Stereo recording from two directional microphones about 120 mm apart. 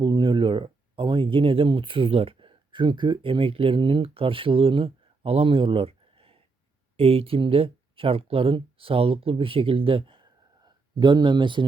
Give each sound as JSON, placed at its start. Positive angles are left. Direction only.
{"t": 0.0, "sound": "speech", "side_deg": -40}